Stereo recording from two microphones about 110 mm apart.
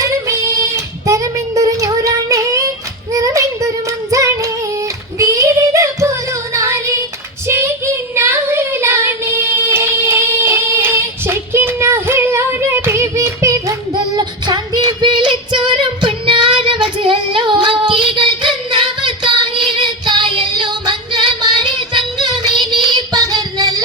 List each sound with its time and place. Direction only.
1.0 s child singing: 30° right (ahead or behind)
7.4 s female singing: 25° right (ahead or behind)
8.1 s child singing: 20° right (ahead or behind)
13.9 s female singing: 40° right (ahead or behind)
16.6 s child singing: 50° right (ahead or behind); by 23.8 s 35° right (ahead or behind)